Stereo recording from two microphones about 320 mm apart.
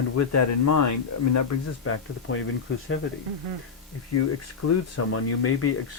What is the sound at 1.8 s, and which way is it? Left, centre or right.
Speech, left.